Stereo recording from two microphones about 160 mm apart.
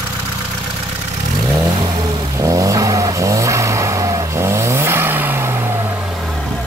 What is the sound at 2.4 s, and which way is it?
Vehicle, 20° right (ahead or behind).